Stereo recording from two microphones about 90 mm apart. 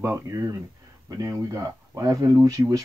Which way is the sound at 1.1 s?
35° right (ahead or behind).